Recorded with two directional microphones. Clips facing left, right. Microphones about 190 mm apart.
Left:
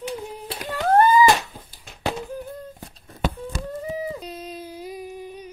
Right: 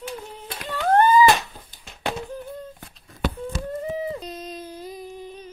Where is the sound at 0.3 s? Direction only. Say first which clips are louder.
Left 2 dB; 10° left (ahead or behind).